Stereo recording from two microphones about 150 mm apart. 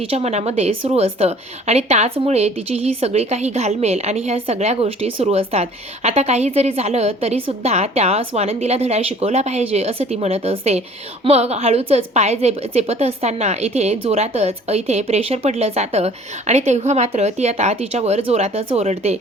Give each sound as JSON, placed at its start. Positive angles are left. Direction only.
{"t": 0.0, "sound": "a woman's voice", "side_deg": -40}